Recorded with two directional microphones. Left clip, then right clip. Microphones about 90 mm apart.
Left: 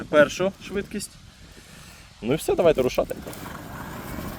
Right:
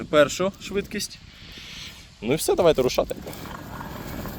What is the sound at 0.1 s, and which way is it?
Speech, 50° right (ahead or behind).